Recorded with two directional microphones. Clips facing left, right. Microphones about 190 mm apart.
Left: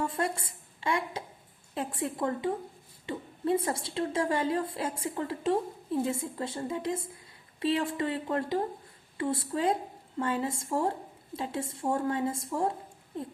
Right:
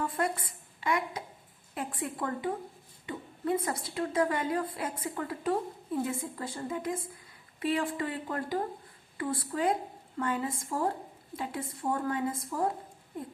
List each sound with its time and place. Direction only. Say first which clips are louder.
0.1 s a woman's voice: even; 25° left (ahead or behind)